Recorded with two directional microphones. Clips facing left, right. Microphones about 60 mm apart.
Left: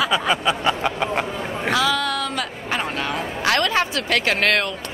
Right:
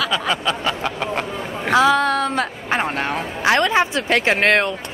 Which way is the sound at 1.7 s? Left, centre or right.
Right.